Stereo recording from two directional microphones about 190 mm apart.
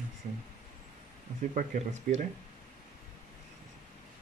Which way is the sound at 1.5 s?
40° right (ahead or behind).